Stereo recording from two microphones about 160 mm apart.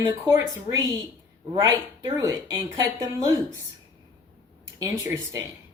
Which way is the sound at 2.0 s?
20° right (ahead or behind).